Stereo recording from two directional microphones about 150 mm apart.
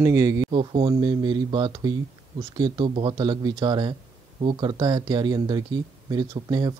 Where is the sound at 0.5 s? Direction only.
35° right (ahead or behind).